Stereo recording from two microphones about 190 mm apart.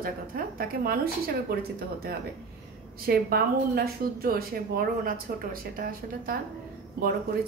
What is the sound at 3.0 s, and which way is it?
A woman's voice, 55° right (ahead or behind).